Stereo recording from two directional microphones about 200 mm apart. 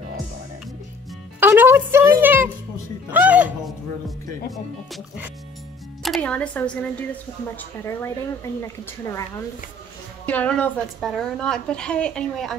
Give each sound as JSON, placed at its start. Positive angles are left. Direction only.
{"t": 1.4, "sound": "music", "side_deg": -10}
{"t": 6.0, "sound": "a woman's voice", "side_deg": 5}
{"t": 10.2, "sound": "a woman's voice", "side_deg": 5}